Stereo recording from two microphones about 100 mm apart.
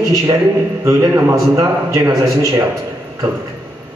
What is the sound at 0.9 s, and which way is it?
A man's voice, 30° right (ahead or behind).